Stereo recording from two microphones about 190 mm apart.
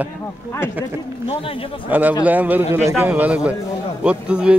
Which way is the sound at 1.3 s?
30° left (ahead or behind).